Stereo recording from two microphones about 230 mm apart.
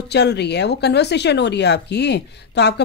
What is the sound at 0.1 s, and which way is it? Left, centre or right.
Speech, left.